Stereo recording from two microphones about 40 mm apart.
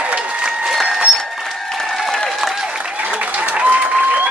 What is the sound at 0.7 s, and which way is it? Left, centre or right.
Applause, centre.